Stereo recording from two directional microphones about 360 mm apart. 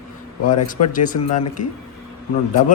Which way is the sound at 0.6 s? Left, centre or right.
Left.